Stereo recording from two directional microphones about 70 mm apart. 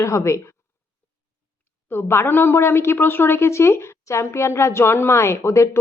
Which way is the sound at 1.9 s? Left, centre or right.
Left.